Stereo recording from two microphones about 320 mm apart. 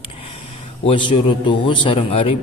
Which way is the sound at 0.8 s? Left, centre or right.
Centre.